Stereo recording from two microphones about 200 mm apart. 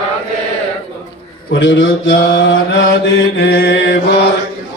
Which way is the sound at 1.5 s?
65° left (ahead or behind).